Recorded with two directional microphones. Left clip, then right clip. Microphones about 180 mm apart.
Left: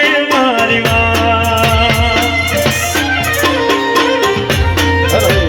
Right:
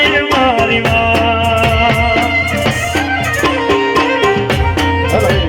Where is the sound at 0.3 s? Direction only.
30° left (ahead or behind).